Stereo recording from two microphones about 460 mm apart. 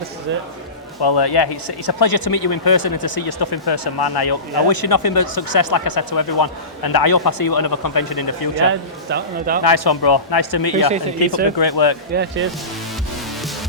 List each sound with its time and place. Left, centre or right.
1.0 s speech: left
9.0 s a man's voice: right
9.6 s speech: left
10.8 s speech: centre
11.5 s speech: left
12.1 s a man's voice: right